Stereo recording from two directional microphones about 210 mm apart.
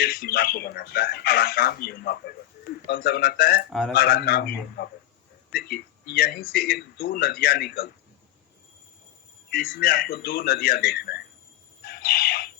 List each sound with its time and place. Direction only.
0.0 s speech: 45° left (ahead or behind)
3.7 s a man's voice: centre (ahead or behind)
3.9 s speech: 45° left (ahead or behind)
9.5 s speech: 45° left (ahead or behind)
11.8 s bird: 45° left (ahead or behind)